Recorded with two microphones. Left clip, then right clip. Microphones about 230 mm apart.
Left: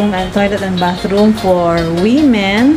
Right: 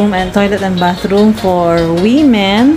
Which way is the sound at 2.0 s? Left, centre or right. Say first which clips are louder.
Right 2 dB; centre.